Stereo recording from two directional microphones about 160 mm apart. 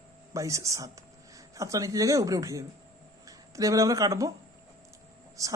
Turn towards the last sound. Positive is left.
turn(degrees=-20)  # may be behind; listen again after turning